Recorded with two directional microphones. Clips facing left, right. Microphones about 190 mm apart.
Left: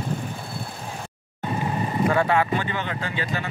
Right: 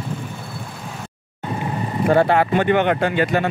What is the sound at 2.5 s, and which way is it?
Speech, 60° right (ahead or behind).